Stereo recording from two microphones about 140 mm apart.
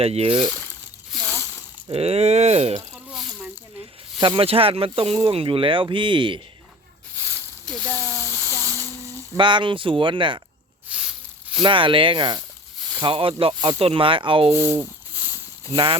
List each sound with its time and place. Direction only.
0.0 s speech: 45° right (ahead or behind)
1.2 s a sound: 15° left (ahead or behind)
1.9 s speech: 45° right (ahead or behind)
2.9 s snake: 5° right (ahead or behind)
4.2 s speech: 40° right (ahead or behind)
7.3 s a sound: 5° left (ahead or behind)
9.4 s speech: 35° right (ahead or behind)
10.8 s a sound: 5° right (ahead or behind)
11.6 s speech: 35° right (ahead or behind)
14.5 s speech: 15° right (ahead or behind)
15.7 s speech: 35° right (ahead or behind)